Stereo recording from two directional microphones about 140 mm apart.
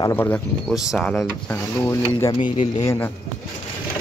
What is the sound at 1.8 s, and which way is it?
Speech, 20° left (ahead or behind).